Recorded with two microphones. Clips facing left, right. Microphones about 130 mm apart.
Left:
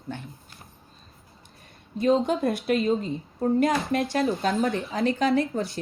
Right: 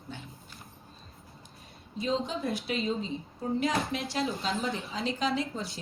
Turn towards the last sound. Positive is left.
turn(degrees=55)  # may be behind; listen again after turning